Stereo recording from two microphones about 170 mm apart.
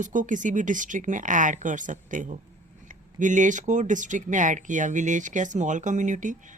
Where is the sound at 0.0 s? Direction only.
50° right (ahead or behind).